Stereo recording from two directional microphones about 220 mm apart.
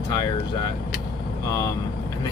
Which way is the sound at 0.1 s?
20° left (ahead or behind).